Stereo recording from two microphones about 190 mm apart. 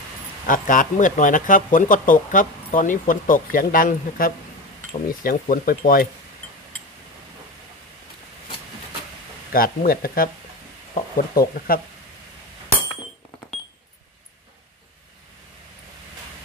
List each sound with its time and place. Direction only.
0.5 s speech: 45° left (ahead or behind)
9.5 s speech: 50° left (ahead or behind)